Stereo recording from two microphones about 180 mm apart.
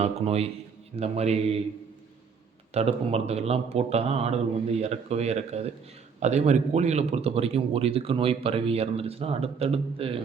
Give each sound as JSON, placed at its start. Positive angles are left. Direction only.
{"t": 0.0, "sound": "speech", "side_deg": -35}
{"t": 2.7, "sound": "speech", "side_deg": -35}